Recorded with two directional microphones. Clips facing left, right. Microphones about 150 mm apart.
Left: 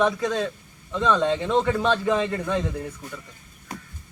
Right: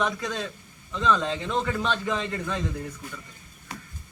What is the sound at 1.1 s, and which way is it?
Speech, 20° left (ahead or behind).